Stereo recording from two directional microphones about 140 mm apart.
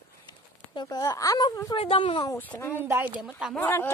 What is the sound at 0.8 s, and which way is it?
Speech, 30° left (ahead or behind).